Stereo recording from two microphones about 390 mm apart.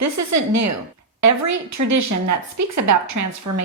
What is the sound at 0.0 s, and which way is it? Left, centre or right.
A woman's voice, right.